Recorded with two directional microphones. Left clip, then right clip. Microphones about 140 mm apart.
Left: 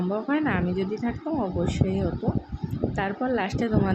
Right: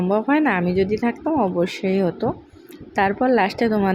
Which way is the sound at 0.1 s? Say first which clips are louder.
Right 8 dB; 35° right (ahead or behind).